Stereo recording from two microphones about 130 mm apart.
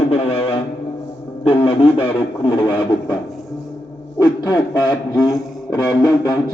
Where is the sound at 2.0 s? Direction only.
40° left (ahead or behind).